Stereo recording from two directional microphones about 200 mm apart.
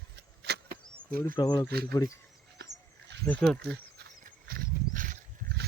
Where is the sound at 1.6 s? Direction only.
50° right (ahead or behind).